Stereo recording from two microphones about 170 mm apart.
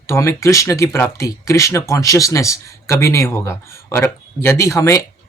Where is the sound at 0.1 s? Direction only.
15° left (ahead or behind).